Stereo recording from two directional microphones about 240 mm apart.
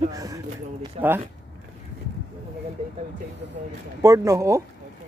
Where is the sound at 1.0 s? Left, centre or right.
Right.